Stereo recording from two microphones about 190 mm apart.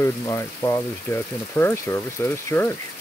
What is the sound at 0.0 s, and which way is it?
Speech, 15° left (ahead or behind).